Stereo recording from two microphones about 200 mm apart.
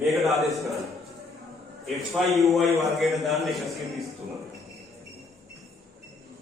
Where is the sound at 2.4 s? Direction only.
Centre (ahead or behind).